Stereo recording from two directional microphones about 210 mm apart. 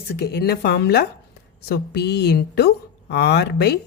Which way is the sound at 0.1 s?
50° left (ahead or behind).